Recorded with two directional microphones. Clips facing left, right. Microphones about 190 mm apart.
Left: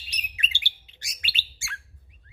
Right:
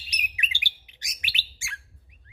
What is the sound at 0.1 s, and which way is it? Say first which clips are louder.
Bird: right 1 dB; 15° right (ahead or behind).